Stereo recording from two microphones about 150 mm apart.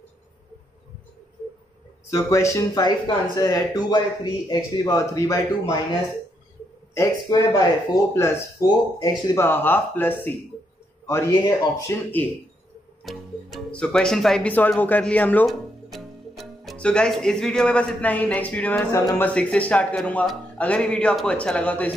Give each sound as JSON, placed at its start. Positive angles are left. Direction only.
{"t": 2.0, "sound": "speech", "side_deg": 20}
{"t": 6.9, "sound": "speech", "side_deg": 20}
{"t": 13.0, "sound": "speech", "side_deg": 0}
{"t": 15.4, "sound": "speech", "side_deg": 0}